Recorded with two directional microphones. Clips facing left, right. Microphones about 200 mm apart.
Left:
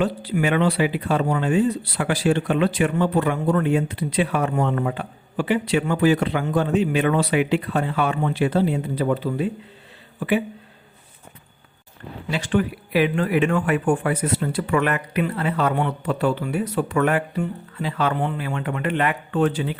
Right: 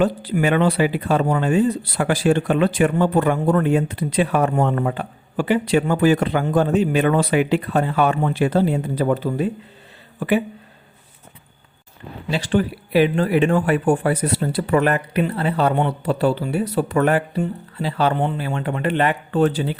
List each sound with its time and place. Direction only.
0.0 s speech: 45° right (ahead or behind)
12.3 s speech: 30° right (ahead or behind)